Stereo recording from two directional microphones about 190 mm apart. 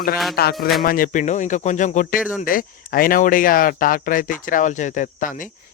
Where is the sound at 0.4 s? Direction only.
55° left (ahead or behind).